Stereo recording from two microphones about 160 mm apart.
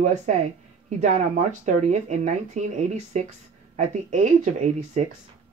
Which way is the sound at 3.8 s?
50° right (ahead or behind).